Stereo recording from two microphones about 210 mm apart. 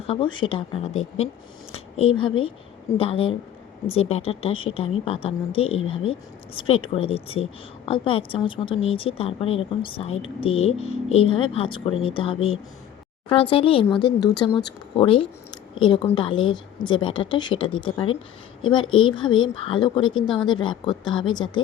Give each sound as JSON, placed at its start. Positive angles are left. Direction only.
{"t": 0.1, "sound": "speech", "side_deg": 25}